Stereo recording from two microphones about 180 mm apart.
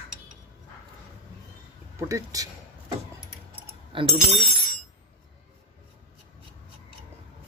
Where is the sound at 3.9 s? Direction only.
30° right (ahead or behind).